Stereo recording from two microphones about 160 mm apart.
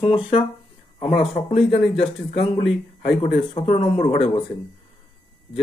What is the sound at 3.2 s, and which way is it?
Speech, 35° left (ahead or behind).